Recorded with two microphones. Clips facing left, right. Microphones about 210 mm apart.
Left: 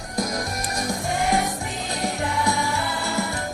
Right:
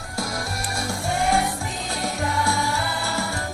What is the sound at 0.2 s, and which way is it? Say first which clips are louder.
Music: left 3 dB; 20° left (ahead or behind).